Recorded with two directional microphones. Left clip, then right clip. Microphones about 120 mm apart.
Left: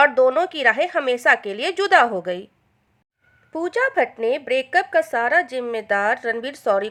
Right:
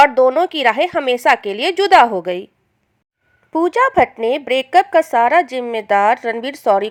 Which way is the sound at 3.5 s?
35° right (ahead or behind).